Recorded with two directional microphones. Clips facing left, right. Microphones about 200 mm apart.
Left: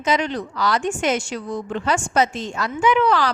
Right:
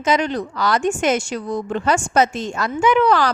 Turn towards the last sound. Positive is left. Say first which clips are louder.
# right 2 dB
turn(degrees=-45)  # may be behind; listen again after turning